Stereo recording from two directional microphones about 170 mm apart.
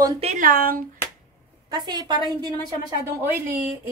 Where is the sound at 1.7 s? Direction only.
25° right (ahead or behind).